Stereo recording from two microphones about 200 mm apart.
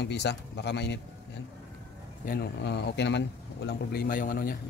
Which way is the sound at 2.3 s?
55° left (ahead or behind).